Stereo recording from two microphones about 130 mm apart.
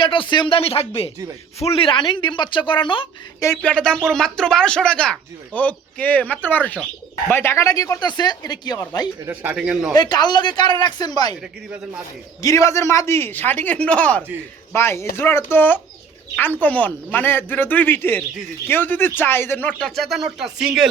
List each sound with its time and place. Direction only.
0.0 s speech: 40° left (ahead or behind)
3.6 s speech: 5° left (ahead or behind); by 8.8 s 30° left (ahead or behind)
9.2 s speech: 15° right (ahead or behind)
9.9 s speech: 30° left (ahead or behind)
12.4 s speech: 25° left (ahead or behind)
20.0 s speech: centre (ahead or behind)